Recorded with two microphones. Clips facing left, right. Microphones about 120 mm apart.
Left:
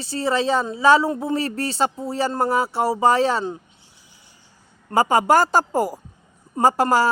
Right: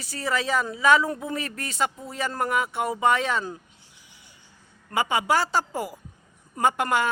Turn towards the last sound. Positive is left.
turn(degrees=35)  # may be behind; listen again after turning